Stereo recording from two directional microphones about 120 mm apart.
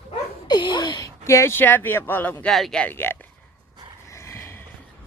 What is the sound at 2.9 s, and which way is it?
Speech, 20° left (ahead or behind).